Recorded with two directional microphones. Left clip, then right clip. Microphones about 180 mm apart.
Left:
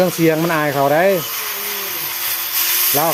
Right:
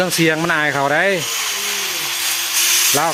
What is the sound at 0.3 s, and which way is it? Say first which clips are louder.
Speech: even; 15° right (ahead or behind).